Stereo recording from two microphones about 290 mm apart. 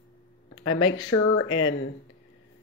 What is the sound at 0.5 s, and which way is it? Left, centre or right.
Speech, left.